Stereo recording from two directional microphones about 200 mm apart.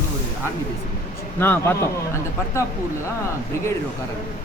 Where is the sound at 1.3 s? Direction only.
10° left (ahead or behind).